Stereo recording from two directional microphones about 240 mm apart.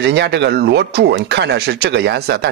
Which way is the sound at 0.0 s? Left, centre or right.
Right.